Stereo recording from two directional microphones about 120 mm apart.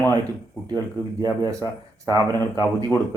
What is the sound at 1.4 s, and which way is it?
Speech, 30° right (ahead or behind).